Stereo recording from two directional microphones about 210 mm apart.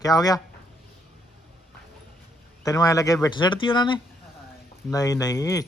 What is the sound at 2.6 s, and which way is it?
A man's voice, 15° left (ahead or behind).